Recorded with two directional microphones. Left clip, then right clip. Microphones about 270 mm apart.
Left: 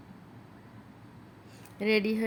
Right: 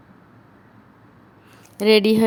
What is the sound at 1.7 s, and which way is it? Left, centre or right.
Speech, right.